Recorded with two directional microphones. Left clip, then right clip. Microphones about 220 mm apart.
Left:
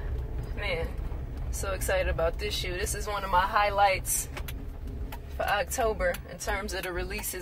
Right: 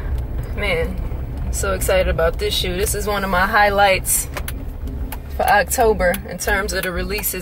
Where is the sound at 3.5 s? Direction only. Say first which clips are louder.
Right 13 dB; 5° right (ahead or behind).